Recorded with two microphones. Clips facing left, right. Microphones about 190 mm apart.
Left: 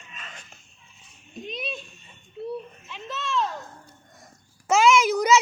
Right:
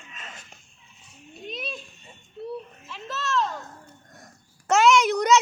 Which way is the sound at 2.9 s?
Centre (ahead or behind).